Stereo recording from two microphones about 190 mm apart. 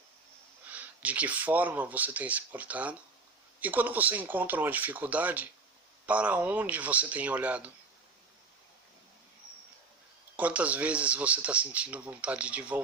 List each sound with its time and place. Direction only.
0.7 s speech: 10° right (ahead or behind)
10.3 s speech: 5° right (ahead or behind)